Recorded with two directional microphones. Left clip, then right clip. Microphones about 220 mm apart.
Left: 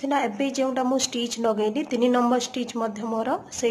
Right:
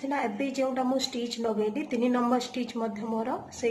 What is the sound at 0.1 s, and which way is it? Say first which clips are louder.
Speech: left 5 dB; 30° left (ahead or behind).